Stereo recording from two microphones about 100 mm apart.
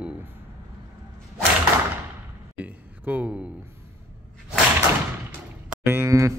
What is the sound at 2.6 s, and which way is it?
Speech, 15° right (ahead or behind).